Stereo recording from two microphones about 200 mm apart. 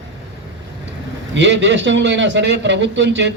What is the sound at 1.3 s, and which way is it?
A man's voice, 65° right (ahead or behind).